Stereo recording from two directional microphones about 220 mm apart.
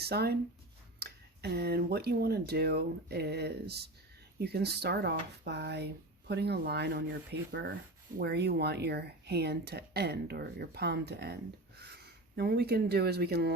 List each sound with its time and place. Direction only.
0.0 s speech: 45° right (ahead or behind)
12.4 s speech: 45° right (ahead or behind)